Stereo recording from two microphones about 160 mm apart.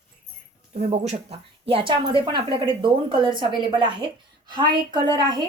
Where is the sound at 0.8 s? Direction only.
45° right (ahead or behind); by 5.5 s 25° right (ahead or behind).